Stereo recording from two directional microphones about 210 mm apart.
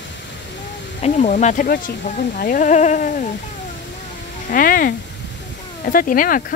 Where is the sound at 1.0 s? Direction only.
35° left (ahead or behind).